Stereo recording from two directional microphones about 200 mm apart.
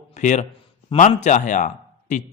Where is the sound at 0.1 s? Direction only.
40° left (ahead or behind).